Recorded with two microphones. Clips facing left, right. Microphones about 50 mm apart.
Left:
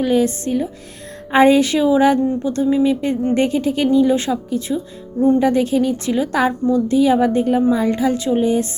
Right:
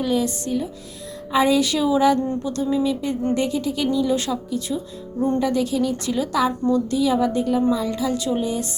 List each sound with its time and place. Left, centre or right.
0.0 s a woman's voice: left